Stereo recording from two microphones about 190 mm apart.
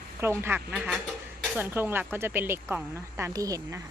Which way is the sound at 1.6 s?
10° right (ahead or behind).